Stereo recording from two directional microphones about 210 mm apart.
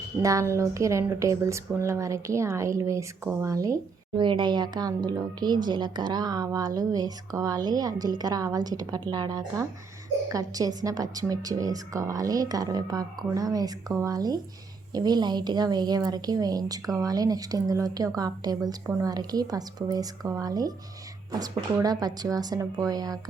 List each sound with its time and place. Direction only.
0.2 s a woman's voice: 15° right (ahead or behind)